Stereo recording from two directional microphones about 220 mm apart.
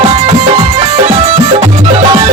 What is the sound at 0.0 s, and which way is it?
Music, 20° right (ahead or behind).